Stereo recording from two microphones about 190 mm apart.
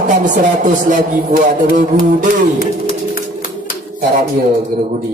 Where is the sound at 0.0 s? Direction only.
40° right (ahead or behind).